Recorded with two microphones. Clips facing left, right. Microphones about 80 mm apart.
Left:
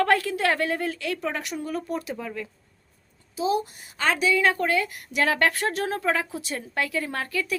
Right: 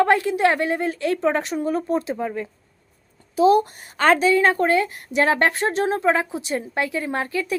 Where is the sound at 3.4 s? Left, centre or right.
Right.